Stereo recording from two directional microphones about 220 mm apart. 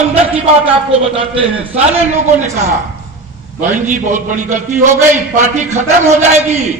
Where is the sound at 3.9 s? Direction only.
35° right (ahead or behind).